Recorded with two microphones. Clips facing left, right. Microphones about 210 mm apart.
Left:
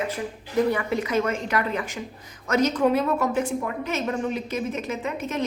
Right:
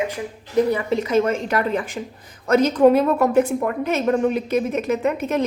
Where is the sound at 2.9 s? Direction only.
55° right (ahead or behind).